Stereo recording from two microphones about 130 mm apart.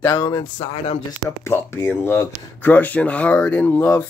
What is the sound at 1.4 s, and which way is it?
Speech, 20° left (ahead or behind).